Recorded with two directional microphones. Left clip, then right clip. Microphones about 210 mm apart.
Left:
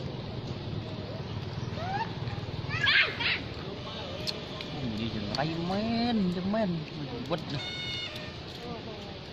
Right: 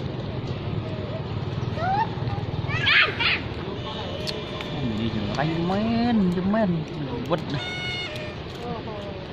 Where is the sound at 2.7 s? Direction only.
45° right (ahead or behind).